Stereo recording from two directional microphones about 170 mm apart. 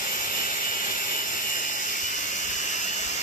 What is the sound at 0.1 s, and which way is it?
Jet engine, 55° left (ahead or behind).